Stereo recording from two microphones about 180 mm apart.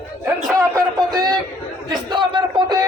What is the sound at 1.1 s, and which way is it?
Speech, 20° right (ahead or behind).